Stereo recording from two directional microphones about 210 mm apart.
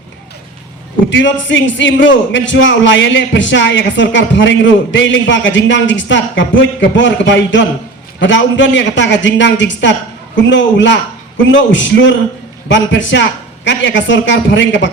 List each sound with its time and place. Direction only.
1.1 s a man's voice: 60° left (ahead or behind)